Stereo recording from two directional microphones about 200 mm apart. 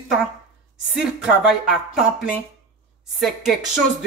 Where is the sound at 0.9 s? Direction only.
Centre (ahead or behind).